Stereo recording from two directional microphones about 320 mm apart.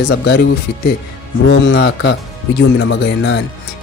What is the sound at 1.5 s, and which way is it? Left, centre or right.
Music, left.